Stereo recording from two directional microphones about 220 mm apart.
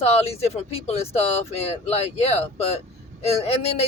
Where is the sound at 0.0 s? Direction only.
30° left (ahead or behind).